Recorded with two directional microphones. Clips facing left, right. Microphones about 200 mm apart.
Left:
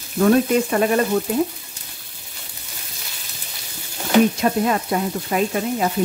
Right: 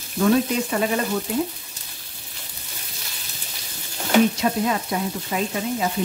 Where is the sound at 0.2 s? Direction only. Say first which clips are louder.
Left 4 dB; 50° left (ahead or behind).